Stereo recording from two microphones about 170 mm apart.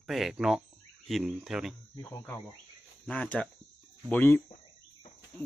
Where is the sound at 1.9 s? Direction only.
20° left (ahead or behind).